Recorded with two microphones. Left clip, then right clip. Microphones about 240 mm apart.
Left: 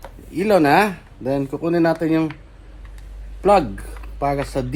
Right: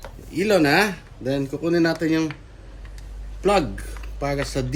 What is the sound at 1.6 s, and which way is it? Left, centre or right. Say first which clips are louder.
Speech: left 2 dB; centre.